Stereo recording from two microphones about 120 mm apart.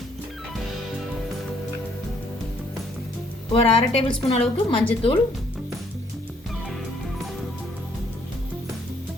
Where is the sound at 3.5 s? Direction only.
50° left (ahead or behind).